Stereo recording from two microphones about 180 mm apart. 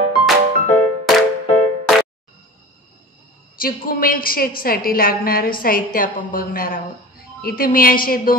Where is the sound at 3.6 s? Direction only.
55° left (ahead or behind).